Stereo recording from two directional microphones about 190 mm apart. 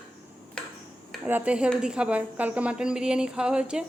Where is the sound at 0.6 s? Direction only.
5° left (ahead or behind).